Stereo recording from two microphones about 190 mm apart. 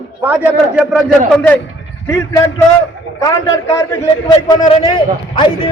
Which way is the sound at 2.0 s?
15° left (ahead or behind).